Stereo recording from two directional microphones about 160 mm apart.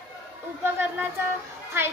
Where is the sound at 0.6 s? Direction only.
15° right (ahead or behind).